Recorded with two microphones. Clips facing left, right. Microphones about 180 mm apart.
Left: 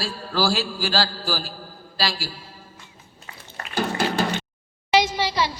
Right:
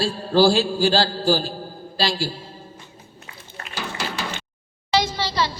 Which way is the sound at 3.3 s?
40° left (ahead or behind).